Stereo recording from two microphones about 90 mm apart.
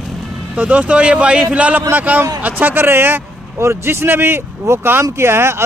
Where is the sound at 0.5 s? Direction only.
15° right (ahead or behind).